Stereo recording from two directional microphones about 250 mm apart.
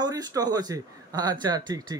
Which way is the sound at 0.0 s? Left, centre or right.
Centre.